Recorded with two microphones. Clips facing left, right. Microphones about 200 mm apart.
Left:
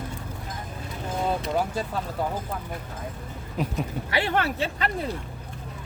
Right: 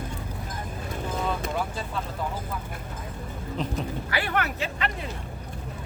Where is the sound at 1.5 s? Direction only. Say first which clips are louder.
Left 4 dB; 40° left (ahead or behind).